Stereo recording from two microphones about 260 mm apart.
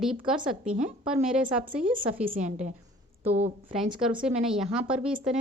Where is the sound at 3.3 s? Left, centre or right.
Right.